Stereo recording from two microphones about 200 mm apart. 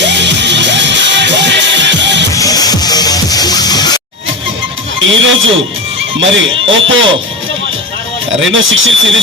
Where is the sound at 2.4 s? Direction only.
20° left (ahead or behind).